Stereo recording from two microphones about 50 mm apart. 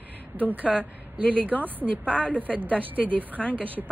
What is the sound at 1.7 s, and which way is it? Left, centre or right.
A woman's voice, right.